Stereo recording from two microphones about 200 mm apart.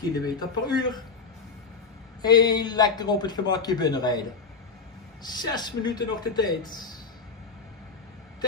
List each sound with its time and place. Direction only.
0.1 s a man's voice: 20° left (ahead or behind)
2.2 s a man's voice: 20° left (ahead or behind)